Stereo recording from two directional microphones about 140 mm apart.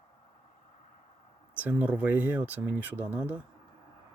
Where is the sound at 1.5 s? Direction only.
10° right (ahead or behind).